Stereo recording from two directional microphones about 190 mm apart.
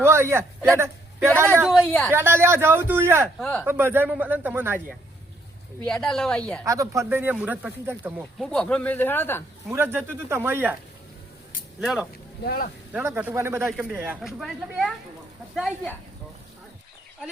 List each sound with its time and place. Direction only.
0.0 s a man's voice: 15° right (ahead or behind)
1.6 s speech: centre (ahead or behind)
2.0 s speech: 15° right (ahead or behind)
3.3 s speech: 5° left (ahead or behind)
3.6 s speech: 10° right (ahead or behind)
5.8 s speech: 5° left (ahead or behind)
6.7 s speech: 15° right (ahead or behind)
8.4 s speech: 5° left (ahead or behind)
9.6 s speech: 10° right (ahead or behind)
11.8 s speech: centre (ahead or behind)
12.5 s speech: 50° left (ahead or behind)
12.9 s speech: 10° right (ahead or behind)